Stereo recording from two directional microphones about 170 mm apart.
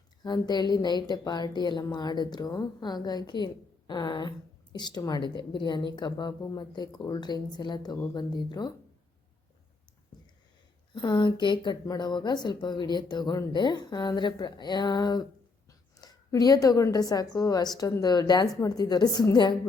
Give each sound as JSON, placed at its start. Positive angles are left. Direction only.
{"t": 0.2, "sound": "a woman's voice", "side_deg": 25}
{"t": 10.9, "sound": "a woman's voice", "side_deg": 25}